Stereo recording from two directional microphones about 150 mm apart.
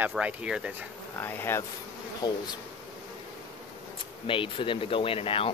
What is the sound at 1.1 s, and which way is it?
Speech, 15° left (ahead or behind).